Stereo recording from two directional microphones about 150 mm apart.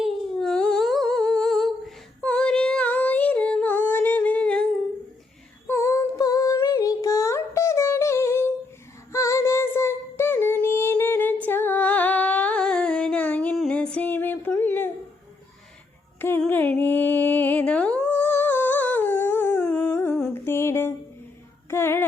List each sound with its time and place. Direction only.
0.0 s humming: 5° left (ahead or behind)
2.2 s singing: 5° left (ahead or behind)
5.6 s female singing: 20° left (ahead or behind)
16.4 s music: 10° left (ahead or behind)
20.3 s a sound: 15° left (ahead or behind)
21.7 s music: 15° left (ahead or behind)